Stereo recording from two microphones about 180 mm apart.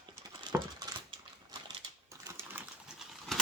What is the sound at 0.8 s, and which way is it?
Typing, 25° right (ahead or behind).